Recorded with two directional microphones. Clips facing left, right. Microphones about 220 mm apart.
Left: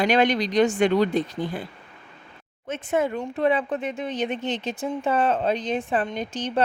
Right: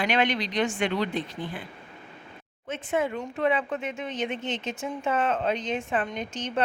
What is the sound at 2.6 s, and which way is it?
Speech, 45° left (ahead or behind).